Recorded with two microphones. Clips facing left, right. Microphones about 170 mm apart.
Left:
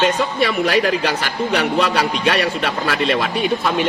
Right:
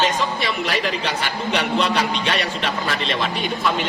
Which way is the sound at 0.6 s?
60° left (ahead or behind).